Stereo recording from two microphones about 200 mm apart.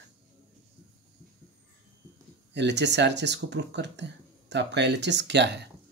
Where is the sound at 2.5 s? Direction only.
60° right (ahead or behind).